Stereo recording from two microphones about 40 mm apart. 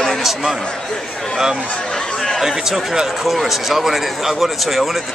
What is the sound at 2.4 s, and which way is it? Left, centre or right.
Speech, centre.